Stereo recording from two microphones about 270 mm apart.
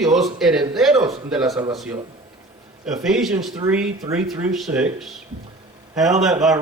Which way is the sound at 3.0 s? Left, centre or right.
Centre.